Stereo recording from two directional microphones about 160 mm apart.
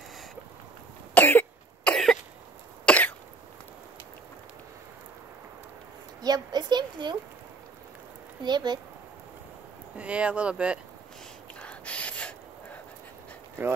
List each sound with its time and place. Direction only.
1.1 s cough: 10° left (ahead or behind)
6.2 s speech: 25° right (ahead or behind)
8.4 s speech: 30° right (ahead or behind)
9.9 s speech: 10° right (ahead or behind)
11.6 s gasp: 10° left (ahead or behind)